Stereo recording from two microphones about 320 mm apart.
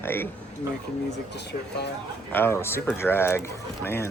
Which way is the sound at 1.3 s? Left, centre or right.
Left.